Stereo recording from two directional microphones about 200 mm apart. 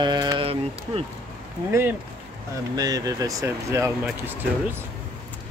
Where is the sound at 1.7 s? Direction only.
10° right (ahead or behind).